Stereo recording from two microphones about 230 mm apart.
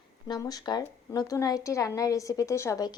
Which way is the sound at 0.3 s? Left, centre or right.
Centre.